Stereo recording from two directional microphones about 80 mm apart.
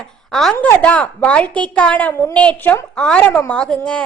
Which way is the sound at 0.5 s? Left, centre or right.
Centre.